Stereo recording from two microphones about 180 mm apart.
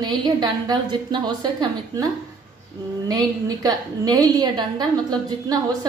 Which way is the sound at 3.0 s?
20° right (ahead or behind).